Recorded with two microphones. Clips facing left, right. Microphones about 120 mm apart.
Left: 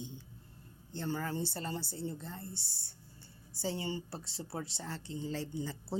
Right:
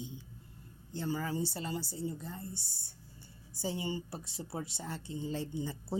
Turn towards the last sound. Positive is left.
turn(degrees=-15)  # may be behind; listen again after turning